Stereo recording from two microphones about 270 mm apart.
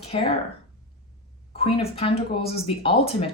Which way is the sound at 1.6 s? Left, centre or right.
Left.